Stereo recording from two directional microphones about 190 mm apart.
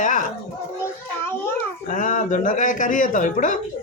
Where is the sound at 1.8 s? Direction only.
45° left (ahead or behind).